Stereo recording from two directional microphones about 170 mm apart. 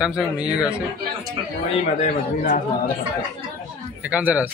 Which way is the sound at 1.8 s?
55° left (ahead or behind).